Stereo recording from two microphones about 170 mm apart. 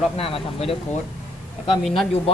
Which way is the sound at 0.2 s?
35° left (ahead or behind).